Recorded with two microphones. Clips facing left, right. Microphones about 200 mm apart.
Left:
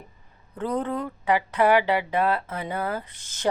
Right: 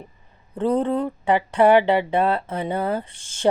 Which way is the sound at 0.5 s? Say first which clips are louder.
Right 6 dB; 30° right (ahead or behind).